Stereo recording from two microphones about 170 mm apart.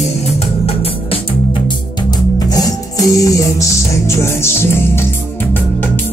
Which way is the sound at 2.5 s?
20° left (ahead or behind).